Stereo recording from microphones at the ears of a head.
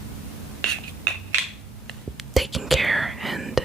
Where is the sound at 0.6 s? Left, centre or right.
Right.